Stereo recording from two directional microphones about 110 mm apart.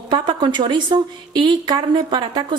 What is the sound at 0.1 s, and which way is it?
A woman's voice, 45° right (ahead or behind).